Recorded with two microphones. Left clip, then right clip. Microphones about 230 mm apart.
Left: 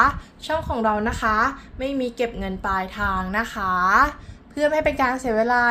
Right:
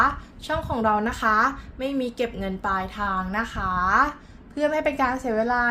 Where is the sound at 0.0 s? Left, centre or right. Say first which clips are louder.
Left 3 dB; centre.